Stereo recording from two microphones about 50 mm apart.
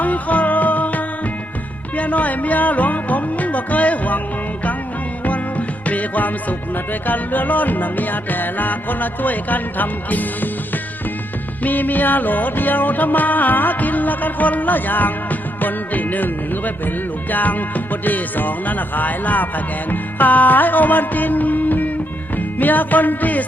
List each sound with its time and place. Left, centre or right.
0.0 s music: left
5.2 s music: left
11.6 s music: left